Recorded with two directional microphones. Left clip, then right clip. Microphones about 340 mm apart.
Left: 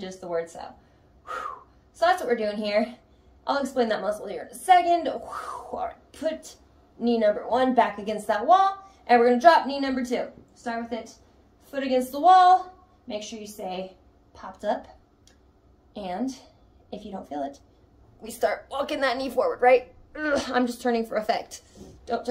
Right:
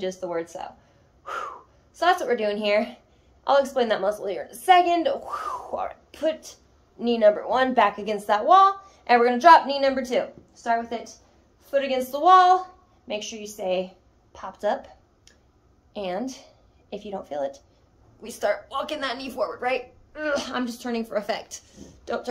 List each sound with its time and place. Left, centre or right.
0.0 s a woman's voice: centre
2.0 s a woman's voice: centre
5.7 s speech: right
7.0 s a woman's voice: centre
14.3 s a sound: centre
15.9 s a woman's voice: centre